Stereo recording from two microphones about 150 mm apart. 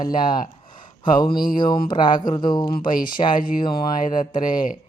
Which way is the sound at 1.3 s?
70° left (ahead or behind).